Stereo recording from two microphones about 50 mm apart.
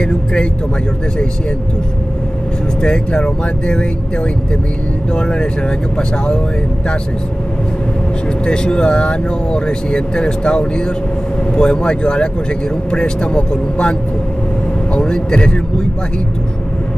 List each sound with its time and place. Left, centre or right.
0.0 s speech: left
2.8 s speech: centre
5.1 s speech: centre
8.5 s speech: centre
15.0 s a man's voice: centre